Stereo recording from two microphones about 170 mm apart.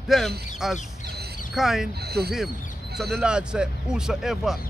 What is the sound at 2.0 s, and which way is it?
Speech, 70° right (ahead or behind).